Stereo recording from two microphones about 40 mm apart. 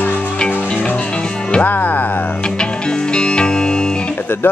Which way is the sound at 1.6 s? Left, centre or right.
Left.